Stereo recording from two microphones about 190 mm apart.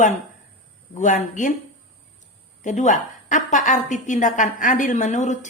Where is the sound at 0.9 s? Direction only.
40° left (ahead or behind).